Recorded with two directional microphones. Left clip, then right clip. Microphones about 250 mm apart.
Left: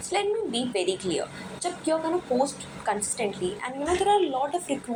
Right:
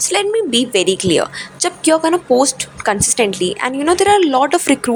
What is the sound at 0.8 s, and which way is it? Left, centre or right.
A woman's voice, right.